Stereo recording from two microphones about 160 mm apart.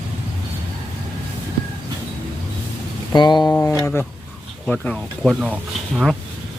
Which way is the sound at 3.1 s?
25° left (ahead or behind).